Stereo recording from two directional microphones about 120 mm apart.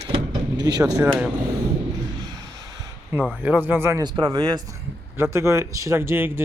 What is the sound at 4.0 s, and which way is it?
Speech, 40° right (ahead or behind).